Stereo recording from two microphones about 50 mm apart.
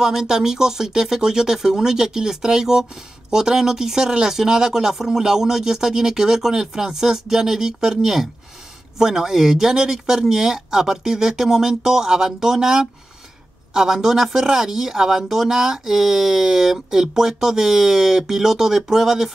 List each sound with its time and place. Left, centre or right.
0.0 s speech: centre